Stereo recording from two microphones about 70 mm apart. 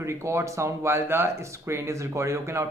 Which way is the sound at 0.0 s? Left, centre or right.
Right.